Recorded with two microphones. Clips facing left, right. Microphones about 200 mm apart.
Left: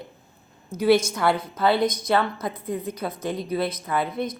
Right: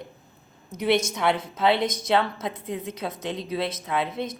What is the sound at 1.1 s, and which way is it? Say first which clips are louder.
Speech: left 1 dB; centre (ahead or behind).